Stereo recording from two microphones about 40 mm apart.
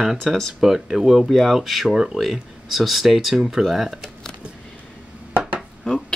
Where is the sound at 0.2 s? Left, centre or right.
Centre.